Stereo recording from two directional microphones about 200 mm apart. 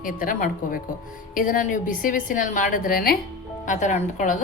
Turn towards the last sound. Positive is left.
turn(degrees=40)  # may be behind; listen again after turning